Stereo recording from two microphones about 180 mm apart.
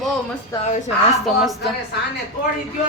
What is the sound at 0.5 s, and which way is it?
Speech, 20° left (ahead or behind).